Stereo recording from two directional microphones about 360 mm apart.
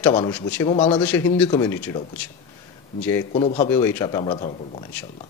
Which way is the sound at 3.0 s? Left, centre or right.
Centre.